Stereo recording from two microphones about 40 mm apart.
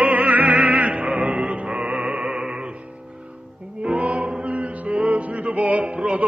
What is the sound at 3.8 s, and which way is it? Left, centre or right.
Music, right.